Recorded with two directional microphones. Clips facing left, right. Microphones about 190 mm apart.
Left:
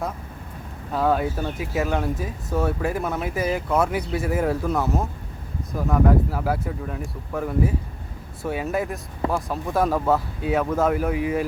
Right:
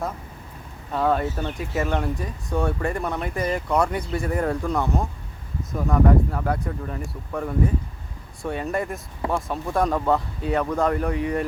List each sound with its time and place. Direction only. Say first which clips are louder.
0.9 s speech: left 1 dB; centre (ahead or behind)